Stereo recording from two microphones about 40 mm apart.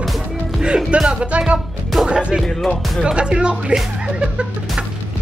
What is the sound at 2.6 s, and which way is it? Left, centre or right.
Speech, centre.